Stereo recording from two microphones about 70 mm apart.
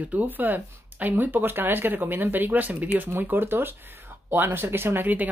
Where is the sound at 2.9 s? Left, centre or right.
Right.